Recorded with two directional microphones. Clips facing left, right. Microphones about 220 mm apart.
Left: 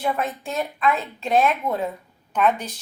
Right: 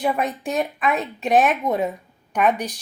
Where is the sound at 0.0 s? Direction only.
15° right (ahead or behind).